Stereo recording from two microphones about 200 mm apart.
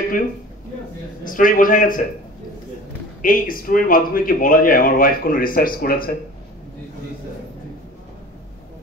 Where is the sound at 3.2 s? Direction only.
45° left (ahead or behind).